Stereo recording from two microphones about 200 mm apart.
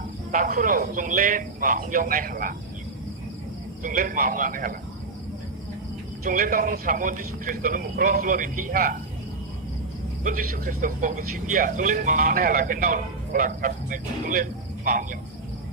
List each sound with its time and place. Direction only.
0.3 s speech: 45° right (ahead or behind)
3.8 s speech: 45° right (ahead or behind)
6.2 s speech: 45° right (ahead or behind)
10.2 s speech: 45° right (ahead or behind)